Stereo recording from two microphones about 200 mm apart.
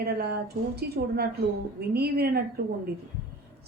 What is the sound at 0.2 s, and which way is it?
Speech, 55° right (ahead or behind).